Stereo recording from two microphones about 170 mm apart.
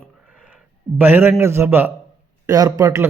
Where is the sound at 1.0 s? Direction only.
10° right (ahead or behind).